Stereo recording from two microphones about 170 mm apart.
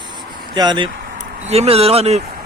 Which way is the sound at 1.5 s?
35° right (ahead or behind).